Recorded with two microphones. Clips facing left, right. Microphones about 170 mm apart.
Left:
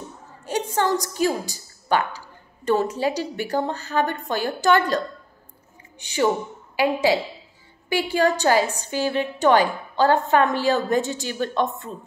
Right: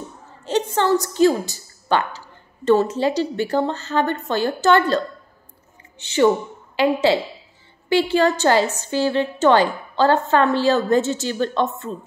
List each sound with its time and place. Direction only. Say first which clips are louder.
0.5 s a woman's voice: right 4 dB; 10° left (ahead or behind)